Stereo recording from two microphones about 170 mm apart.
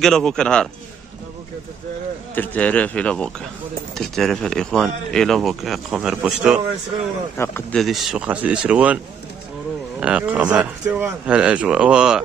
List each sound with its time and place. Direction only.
0.0 s speech: 5° left (ahead or behind)
2.3 s speech: 10° left (ahead or behind)
7.3 s speech: 15° left (ahead or behind)
7.7 s speech: centre (ahead or behind)